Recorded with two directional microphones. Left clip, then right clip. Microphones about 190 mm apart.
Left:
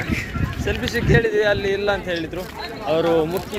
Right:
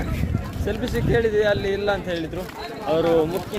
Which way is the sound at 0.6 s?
Centre (ahead or behind).